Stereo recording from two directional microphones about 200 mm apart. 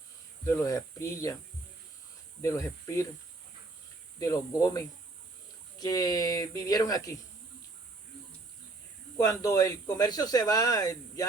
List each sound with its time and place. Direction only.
0.5 s speech: 15° left (ahead or behind)
2.4 s speech: 15° left (ahead or behind)
4.2 s speech: 15° left (ahead or behind)
9.1 s speech: 15° left (ahead or behind)